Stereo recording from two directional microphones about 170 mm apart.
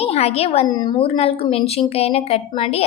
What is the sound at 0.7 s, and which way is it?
A woman's voice, 25° left (ahead or behind).